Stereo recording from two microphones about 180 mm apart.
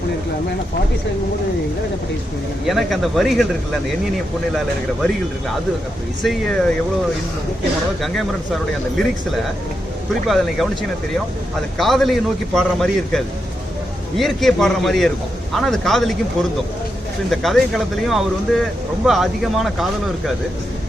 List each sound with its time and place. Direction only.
2.6 s speech: centre (ahead or behind)
6.2 s speech: 5° left (ahead or behind)
8.0 s speech: centre (ahead or behind)
10.2 s speech: centre (ahead or behind)
11.8 s speech: centre (ahead or behind)
17.3 s speech: centre (ahead or behind)